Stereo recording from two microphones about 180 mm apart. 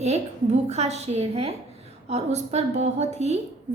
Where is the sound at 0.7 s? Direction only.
35° right (ahead or behind).